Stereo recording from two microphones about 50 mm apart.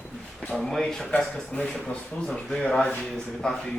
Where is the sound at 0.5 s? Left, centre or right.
Centre.